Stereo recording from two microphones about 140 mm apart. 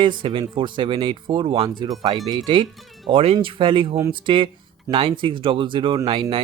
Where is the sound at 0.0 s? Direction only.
35° right (ahead or behind).